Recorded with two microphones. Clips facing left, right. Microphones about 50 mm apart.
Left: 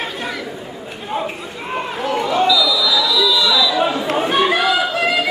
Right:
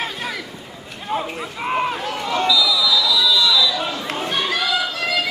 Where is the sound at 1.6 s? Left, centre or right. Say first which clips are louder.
Right 4 dB; centre.